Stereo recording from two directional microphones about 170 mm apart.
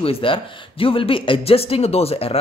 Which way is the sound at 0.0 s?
30° left (ahead or behind).